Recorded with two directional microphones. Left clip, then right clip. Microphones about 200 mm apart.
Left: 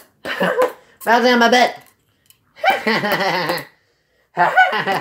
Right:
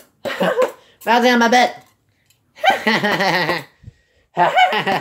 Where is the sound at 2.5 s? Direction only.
20° right (ahead or behind).